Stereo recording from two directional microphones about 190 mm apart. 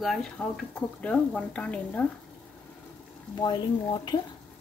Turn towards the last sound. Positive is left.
turn(degrees=20)  # may be behind; listen again after turning